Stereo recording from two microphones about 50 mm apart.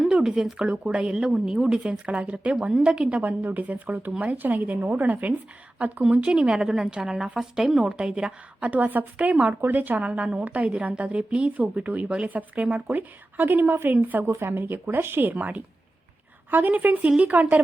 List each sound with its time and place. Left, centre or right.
0.1 s a sound: centre
0.5 s a woman's voice: right
1.8 s a woman's voice: right
3.2 s a woman's voice: right; by 7.9 s centre
7.9 s a woman's voice: centre
8.6 s a woman's voice: right
9.1 s a woman's voice: right
9.5 s a woman's voice: right
12.9 s a woman's voice: right
14.3 s a woman's voice: right